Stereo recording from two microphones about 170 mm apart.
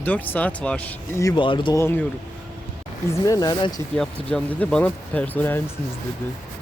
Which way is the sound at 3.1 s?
20° left (ahead or behind).